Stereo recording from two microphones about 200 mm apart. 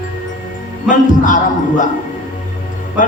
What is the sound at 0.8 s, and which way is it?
Speech, 40° left (ahead or behind).